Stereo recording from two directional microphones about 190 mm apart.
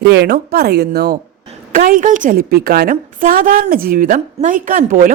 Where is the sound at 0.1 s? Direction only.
60° right (ahead or behind).